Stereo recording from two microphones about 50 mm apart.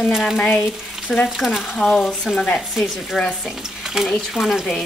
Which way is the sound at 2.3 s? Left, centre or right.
Centre.